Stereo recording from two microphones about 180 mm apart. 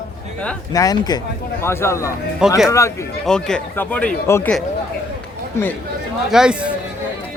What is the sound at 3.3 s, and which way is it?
Speech, 5° left (ahead or behind).